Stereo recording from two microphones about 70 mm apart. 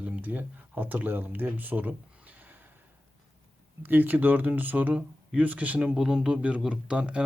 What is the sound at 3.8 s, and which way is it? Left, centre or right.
Speech, right.